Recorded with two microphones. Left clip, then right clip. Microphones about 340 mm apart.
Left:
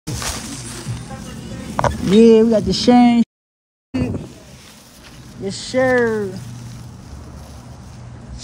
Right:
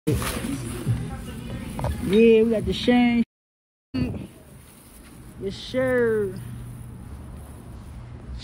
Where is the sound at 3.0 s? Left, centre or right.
Centre.